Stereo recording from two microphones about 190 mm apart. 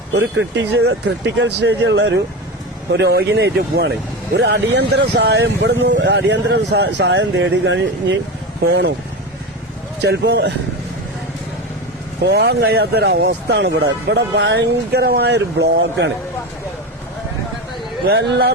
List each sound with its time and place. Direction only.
0.1 s speech: 70° right (ahead or behind)
10.0 s speech: 60° right (ahead or behind)
12.2 s speech: 60° right (ahead or behind)
18.1 s speech: 60° right (ahead or behind)